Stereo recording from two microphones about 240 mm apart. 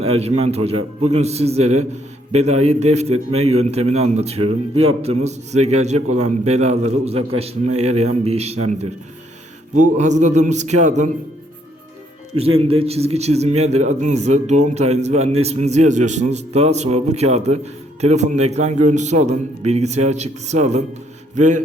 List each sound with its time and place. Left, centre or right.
0.0 s a man's voice: right
12.4 s a man's voice: right